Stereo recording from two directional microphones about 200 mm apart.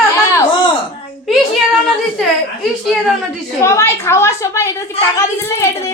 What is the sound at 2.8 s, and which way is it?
Speech, centre (ahead or behind).